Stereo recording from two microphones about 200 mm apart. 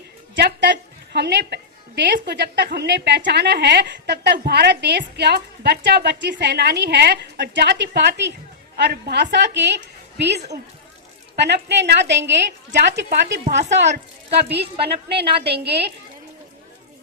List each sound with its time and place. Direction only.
0.3 s a woman's voice: 60° right (ahead or behind)
13.4 s a woman's voice: 35° right (ahead or behind)
15.4 s a woman's voice: 55° right (ahead or behind)